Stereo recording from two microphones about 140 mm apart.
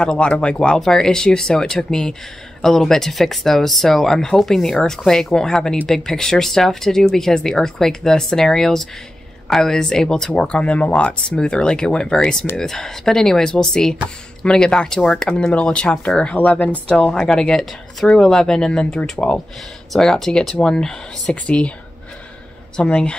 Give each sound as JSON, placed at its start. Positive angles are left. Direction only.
{"t": 0.0, "sound": "speech", "side_deg": 5}
{"t": 22.8, "sound": "speech", "side_deg": 5}